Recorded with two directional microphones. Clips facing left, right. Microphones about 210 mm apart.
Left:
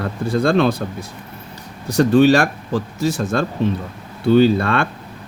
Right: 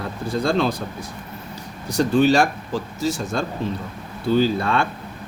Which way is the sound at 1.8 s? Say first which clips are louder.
Left 5 dB; 60° left (ahead or behind).